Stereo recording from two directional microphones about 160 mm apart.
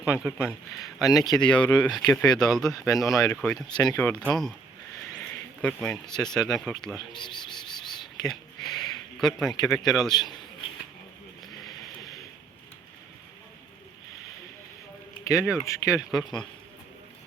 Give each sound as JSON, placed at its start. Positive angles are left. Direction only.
{"t": 0.0, "sound": "speech", "side_deg": -5}
{"t": 1.2, "sound": "speech", "side_deg": 25}
{"t": 1.5, "sound": "speech", "side_deg": 5}
{"t": 2.7, "sound": "speech", "side_deg": 20}
{"t": 3.8, "sound": "speech", "side_deg": 10}
{"t": 5.6, "sound": "speech", "side_deg": 5}
{"t": 8.7, "sound": "speech", "side_deg": 0}
{"t": 15.3, "sound": "speech", "side_deg": -5}
{"t": 15.6, "sound": "speech", "side_deg": 20}
{"t": 15.9, "sound": "speech", "side_deg": 0}